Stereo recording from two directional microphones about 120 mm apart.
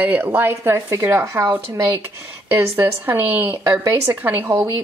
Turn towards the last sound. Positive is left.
turn(degrees=-20)  # may be behind; listen again after turning